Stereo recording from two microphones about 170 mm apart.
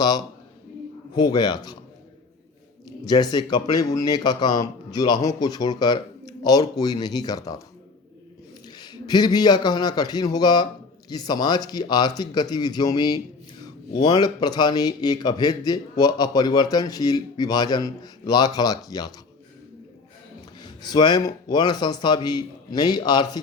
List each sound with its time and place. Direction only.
1.1 s a man's voice: 25° left (ahead or behind)
3.0 s a man's voice: 25° left (ahead or behind)
8.6 s a man's voice: 25° left (ahead or behind)
20.6 s a man's voice: 25° left (ahead or behind)